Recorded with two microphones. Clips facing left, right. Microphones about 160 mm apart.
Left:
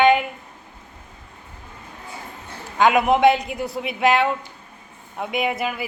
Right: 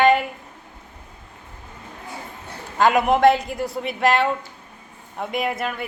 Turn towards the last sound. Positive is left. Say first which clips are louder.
# left 1 dB
turn(degrees=5)  # may be behind; listen again after turning